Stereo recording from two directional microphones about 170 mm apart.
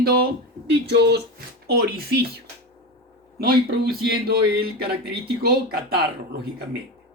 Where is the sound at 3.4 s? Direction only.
65° right (ahead or behind).